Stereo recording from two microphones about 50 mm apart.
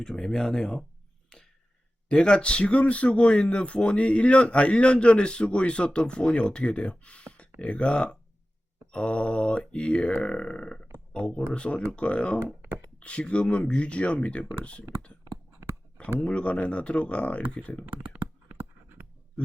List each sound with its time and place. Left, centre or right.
0.0 s speech: centre
1.3 s a sound: centre
2.0 s a man's voice: centre
16.2 s a man's voice: left
17.8 s computer keyboard: right
18.5 s writing: right